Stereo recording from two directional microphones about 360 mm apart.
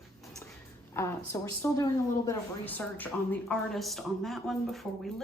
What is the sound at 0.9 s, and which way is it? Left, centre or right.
A woman's voice, centre.